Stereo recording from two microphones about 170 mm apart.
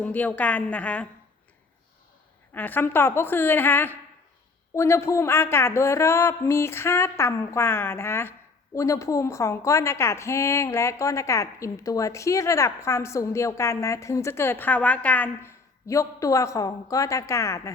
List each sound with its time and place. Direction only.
0.0 s speech: 10° left (ahead or behind)
2.5 s speech: 10° left (ahead or behind)